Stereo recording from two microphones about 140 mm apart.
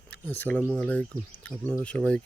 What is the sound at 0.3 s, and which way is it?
Speech, 10° left (ahead or behind).